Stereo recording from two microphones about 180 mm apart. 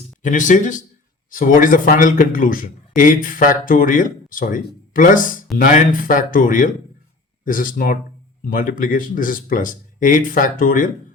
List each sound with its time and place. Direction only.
0.2 s a man's voice: 45° left (ahead or behind)